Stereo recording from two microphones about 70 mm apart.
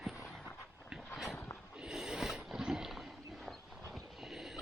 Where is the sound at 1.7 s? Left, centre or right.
Centre.